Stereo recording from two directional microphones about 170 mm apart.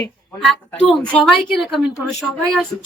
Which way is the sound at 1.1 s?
Centre (ahead or behind).